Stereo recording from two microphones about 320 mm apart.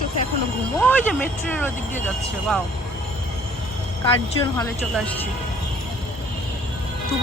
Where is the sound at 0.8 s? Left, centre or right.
Centre.